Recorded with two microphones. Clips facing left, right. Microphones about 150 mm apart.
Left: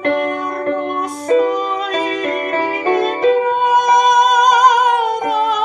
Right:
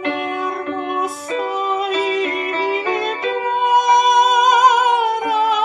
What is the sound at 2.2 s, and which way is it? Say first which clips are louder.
Music: left 2 dB; 50° left (ahead or behind).